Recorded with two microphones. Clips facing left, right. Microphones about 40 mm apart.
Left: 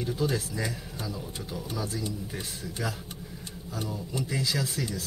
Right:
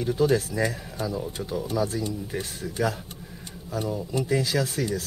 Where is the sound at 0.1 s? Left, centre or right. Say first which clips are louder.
Right 9 dB; centre.